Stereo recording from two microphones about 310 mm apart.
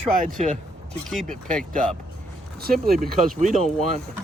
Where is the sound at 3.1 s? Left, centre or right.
Right.